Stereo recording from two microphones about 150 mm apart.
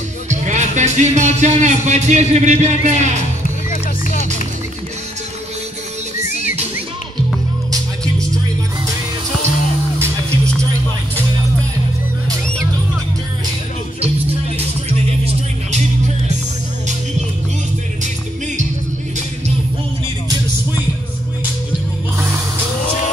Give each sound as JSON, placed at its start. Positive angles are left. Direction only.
{"t": 0.3, "sound": "speech", "side_deg": -50}